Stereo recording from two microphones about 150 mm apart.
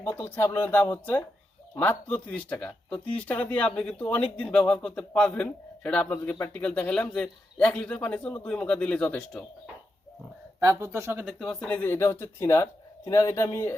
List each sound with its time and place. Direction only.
0.0 s speech: 10° left (ahead or behind)
10.6 s speech: 20° right (ahead or behind)
11.3 s a man's voice: 5° left (ahead or behind); by 13.7 s 20° left (ahead or behind)